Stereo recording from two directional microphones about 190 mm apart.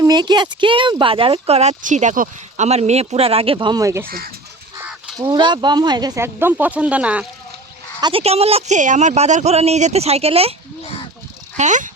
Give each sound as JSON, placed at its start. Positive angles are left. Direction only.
{"t": 0.0, "sound": "speech", "side_deg": -20}
{"t": 4.0, "sound": "speech", "side_deg": -50}
{"t": 4.8, "sound": "fowl", "side_deg": -5}
{"t": 5.2, "sound": "speech", "side_deg": -25}
{"t": 8.0, "sound": "speech", "side_deg": -30}
{"t": 11.5, "sound": "speech", "side_deg": -40}